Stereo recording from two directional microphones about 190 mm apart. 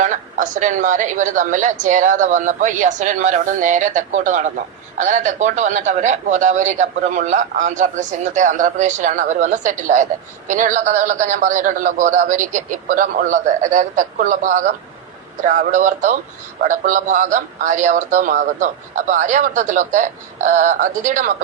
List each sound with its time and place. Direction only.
0.0 s a man's voice: 40° right (ahead or behind)